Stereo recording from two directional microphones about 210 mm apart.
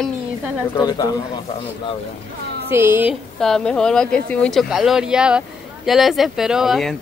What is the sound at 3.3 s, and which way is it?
Speech, centre (ahead or behind).